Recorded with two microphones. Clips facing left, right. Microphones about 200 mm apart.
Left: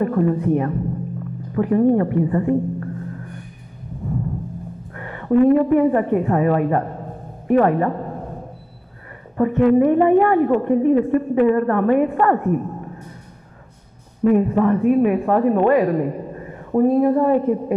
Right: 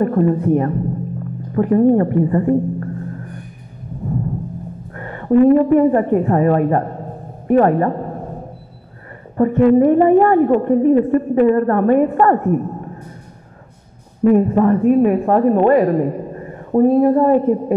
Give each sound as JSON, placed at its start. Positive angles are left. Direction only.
{"t": 0.0, "sound": "a woman's voice", "side_deg": -40}
{"t": 4.9, "sound": "a woman's voice", "side_deg": -45}
{"t": 9.4, "sound": "a woman's voice", "side_deg": -40}
{"t": 14.3, "sound": "a woman's voice", "side_deg": -45}